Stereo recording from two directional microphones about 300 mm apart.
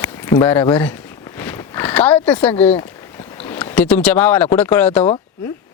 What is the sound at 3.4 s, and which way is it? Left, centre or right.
Speech, centre.